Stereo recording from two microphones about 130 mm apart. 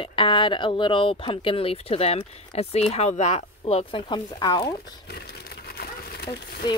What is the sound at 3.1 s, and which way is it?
Speech, 60° left (ahead or behind).